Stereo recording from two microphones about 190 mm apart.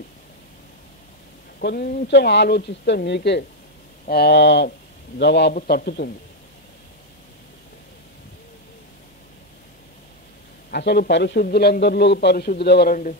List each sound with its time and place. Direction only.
1.6 s a man's voice: 60° left (ahead or behind)
5.5 s a man's voice: 45° left (ahead or behind)
10.7 s a man's voice: 60° left (ahead or behind)